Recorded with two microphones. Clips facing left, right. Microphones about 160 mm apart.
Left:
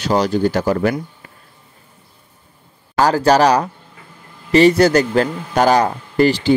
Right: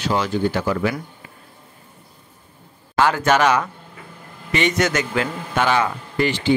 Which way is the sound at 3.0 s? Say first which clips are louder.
Left 4 dB; 35° left (ahead or behind).